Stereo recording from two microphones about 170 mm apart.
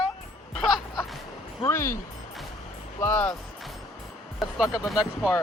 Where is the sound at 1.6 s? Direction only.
15° left (ahead or behind).